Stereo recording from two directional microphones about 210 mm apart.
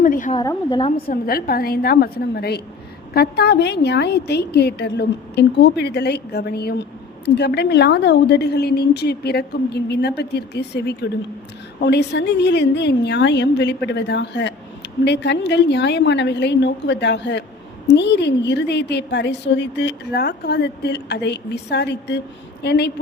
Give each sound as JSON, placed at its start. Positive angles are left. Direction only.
{"t": 0.0, "sound": "a woman's voice", "side_deg": 40}
{"t": 0.3, "sound": "a woman's voice", "side_deg": 20}
{"t": 0.9, "sound": "a woman's voice", "side_deg": 45}